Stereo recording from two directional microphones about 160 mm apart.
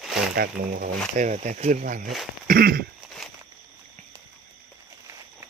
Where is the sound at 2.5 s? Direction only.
70° right (ahead or behind).